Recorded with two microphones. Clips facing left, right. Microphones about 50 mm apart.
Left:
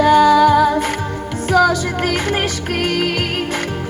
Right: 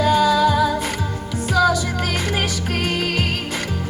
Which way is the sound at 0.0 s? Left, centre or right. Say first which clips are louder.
Left 5 dB; left.